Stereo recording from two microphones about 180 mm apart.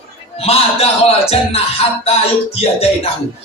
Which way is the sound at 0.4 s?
35° left (ahead or behind).